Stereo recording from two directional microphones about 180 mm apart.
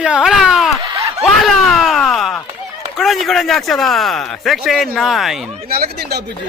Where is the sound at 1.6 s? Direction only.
Centre (ahead or behind).